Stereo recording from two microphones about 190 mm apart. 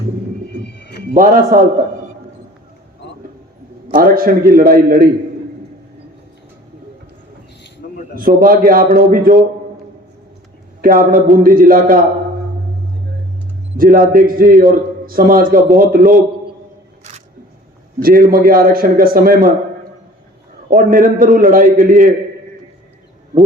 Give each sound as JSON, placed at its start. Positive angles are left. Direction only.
{"t": 1.1, "sound": "a man's voice", "side_deg": -45}
{"t": 3.9, "sound": "a man's voice", "side_deg": -50}
{"t": 8.1, "sound": "a man's voice", "side_deg": -50}
{"t": 10.8, "sound": "a man's voice", "side_deg": -45}
{"t": 13.7, "sound": "a man's voice", "side_deg": -50}
{"t": 17.0, "sound": "single-lens reflex camera", "side_deg": -40}
{"t": 18.0, "sound": "a man's voice", "side_deg": -50}
{"t": 20.7, "sound": "a man's voice", "side_deg": -45}